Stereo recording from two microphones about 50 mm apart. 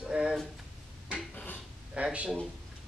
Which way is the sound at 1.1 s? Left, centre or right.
Left.